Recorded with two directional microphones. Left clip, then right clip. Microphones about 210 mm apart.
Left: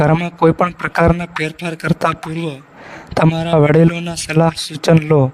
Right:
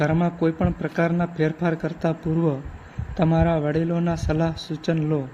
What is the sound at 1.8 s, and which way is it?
Speech, 50° left (ahead or behind).